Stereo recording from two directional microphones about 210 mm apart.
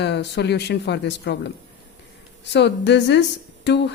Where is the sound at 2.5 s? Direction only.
55° left (ahead or behind).